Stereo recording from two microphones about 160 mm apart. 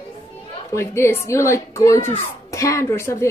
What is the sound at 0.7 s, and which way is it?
A child's voice, 15° left (ahead or behind).